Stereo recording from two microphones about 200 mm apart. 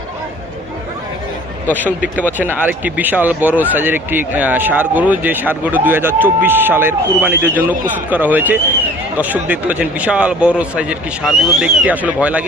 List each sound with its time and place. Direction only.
1.7 s a man's voice: 10° right (ahead or behind)